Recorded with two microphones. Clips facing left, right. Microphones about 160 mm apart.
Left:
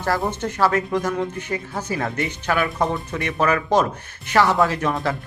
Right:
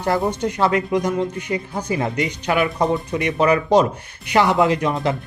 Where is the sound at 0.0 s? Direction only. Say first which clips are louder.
Right 3 dB; 15° right (ahead or behind).